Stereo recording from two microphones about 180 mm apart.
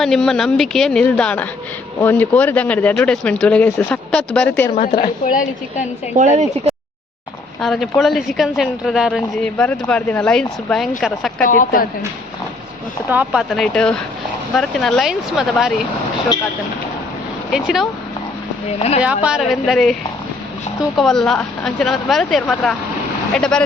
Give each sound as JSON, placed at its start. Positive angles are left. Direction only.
{"t": 0.0, "sound": "a woman's voice", "side_deg": 0}
{"t": 4.7, "sound": "a woman's voice", "side_deg": 45}
{"t": 6.1, "sound": "speech", "side_deg": -40}
{"t": 7.6, "sound": "a woman's voice", "side_deg": 0}
{"t": 11.4, "sound": "a woman's voice", "side_deg": 50}
{"t": 13.1, "sound": "a woman's voice", "side_deg": -5}
{"t": 17.5, "sound": "a woman's voice", "side_deg": -5}
{"t": 18.8, "sound": "speech", "side_deg": 35}
{"t": 19.0, "sound": "a woman's voice", "side_deg": -5}